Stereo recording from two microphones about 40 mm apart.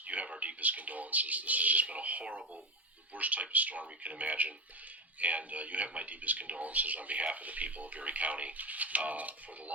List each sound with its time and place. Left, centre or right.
0.1 s a man's voice: right